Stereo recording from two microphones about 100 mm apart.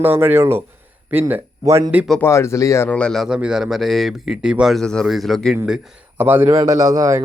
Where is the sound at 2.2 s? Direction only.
30° left (ahead or behind).